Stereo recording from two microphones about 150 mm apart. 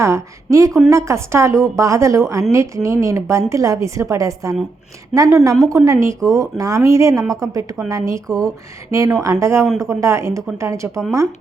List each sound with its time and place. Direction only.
0.0 s a woman's voice: 20° right (ahead or behind)
9.6 s speech: centre (ahead or behind)
9.9 s a woman's voice: 20° right (ahead or behind)